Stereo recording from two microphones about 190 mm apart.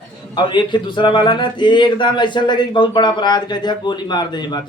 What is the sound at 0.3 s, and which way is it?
Speech, 25° left (ahead or behind).